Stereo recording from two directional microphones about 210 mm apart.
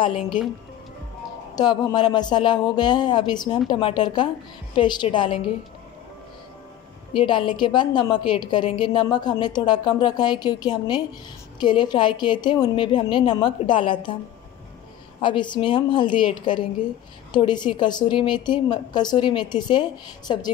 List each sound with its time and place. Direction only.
1.5 s a woman's voice: 20° left (ahead or behind)
7.2 s a woman's voice: 25° left (ahead or behind)
15.1 s a woman's voice: 25° left (ahead or behind)